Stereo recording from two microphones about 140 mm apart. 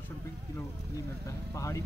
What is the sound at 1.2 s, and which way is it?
Speech, 20° left (ahead or behind).